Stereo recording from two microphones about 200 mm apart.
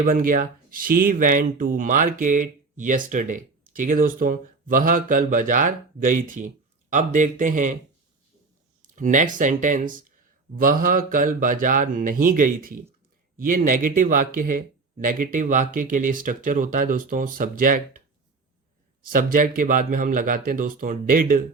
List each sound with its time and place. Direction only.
0.0 s speech: 45° right (ahead or behind)
8.8 s speech: 40° right (ahead or behind)
19.1 s speech: 45° right (ahead or behind)